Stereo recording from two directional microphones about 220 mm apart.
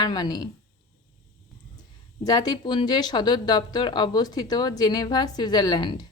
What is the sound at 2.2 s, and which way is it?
Speech, 15° left (ahead or behind).